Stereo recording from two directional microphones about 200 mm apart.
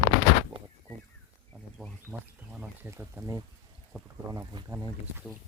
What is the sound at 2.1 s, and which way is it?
Speech, 10° right (ahead or behind).